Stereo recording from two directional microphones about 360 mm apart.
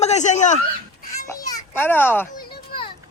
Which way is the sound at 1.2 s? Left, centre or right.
Centre.